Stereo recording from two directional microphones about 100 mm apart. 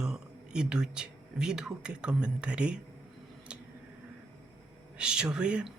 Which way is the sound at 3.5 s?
10° right (ahead or behind).